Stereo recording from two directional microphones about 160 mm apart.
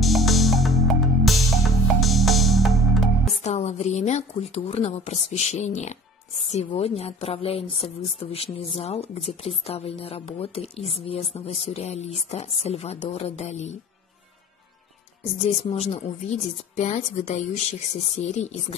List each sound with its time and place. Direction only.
0.0 s music: centre (ahead or behind)
3.4 s a woman's voice: 45° left (ahead or behind)
6.5 s a woman's voice: 35° left (ahead or behind)
15.4 s a woman's voice: 40° left (ahead or behind)